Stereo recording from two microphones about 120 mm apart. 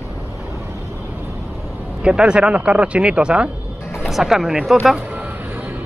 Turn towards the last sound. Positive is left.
turn(degrees=-5)  # may be behind; listen again after turning